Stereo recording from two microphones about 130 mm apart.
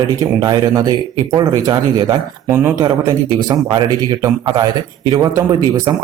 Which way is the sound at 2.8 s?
30° right (ahead or behind).